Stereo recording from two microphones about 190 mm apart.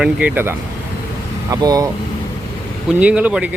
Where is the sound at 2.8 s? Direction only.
5° right (ahead or behind).